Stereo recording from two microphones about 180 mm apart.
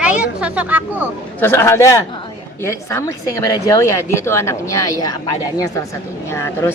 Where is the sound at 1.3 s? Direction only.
10° left (ahead or behind).